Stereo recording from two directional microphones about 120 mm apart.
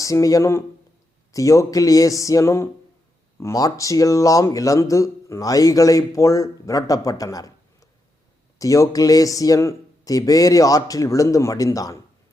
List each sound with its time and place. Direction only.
0.0 s speech: 30° left (ahead or behind)